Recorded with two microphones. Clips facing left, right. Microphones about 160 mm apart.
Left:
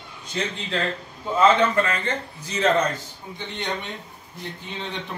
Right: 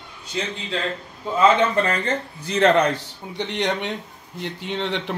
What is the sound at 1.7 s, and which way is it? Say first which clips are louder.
Speech: right 2 dB; 35° right (ahead or behind).